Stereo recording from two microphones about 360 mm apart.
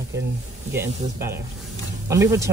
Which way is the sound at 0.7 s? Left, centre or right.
Centre.